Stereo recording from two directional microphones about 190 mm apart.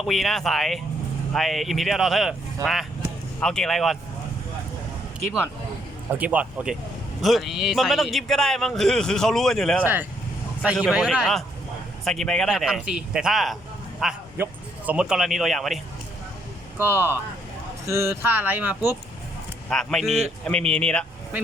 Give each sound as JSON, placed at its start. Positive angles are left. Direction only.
{"t": 0.0, "sound": "speech", "side_deg": 0}
{"t": 2.6, "sound": "speech", "side_deg": -20}
{"t": 3.4, "sound": "speech", "side_deg": 0}
{"t": 5.2, "sound": "speech", "side_deg": -5}
{"t": 9.8, "sound": "a man's voice", "side_deg": -10}
{"t": 16.7, "sound": "speech", "side_deg": -10}
{"t": 19.7, "sound": "speech", "side_deg": 0}